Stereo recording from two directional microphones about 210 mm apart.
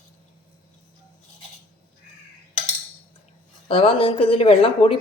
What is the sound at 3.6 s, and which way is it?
Speech, 25° left (ahead or behind).